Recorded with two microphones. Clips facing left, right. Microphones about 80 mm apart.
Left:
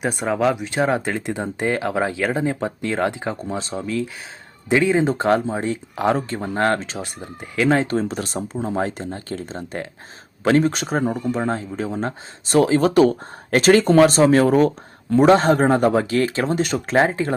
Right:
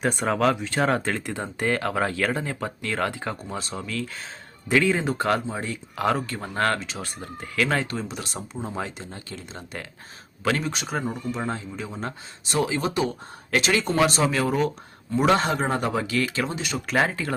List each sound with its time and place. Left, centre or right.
0.0 s speech: centre
0.3 s speech: centre
7.9 s speech: left
16.9 s speech: left